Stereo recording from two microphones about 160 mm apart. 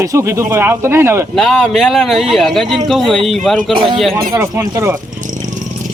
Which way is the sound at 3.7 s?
30° right (ahead or behind).